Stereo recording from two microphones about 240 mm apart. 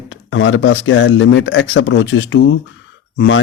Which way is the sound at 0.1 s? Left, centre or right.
Left.